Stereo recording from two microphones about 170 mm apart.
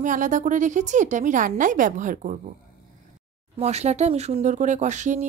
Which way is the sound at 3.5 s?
40° right (ahead or behind).